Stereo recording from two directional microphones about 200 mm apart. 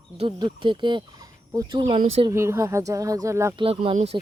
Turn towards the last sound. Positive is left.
turn(degrees=-25)  # may be behind; listen again after turning